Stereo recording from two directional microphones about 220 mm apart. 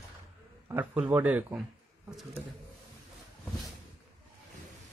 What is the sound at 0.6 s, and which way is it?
Speech, 10° right (ahead or behind).